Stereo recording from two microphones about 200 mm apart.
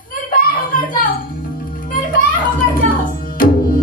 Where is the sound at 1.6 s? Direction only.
45° left (ahead or behind).